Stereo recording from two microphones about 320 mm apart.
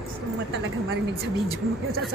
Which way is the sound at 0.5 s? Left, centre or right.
Right.